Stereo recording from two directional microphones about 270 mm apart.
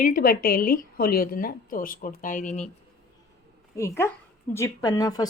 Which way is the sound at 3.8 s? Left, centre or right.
Centre.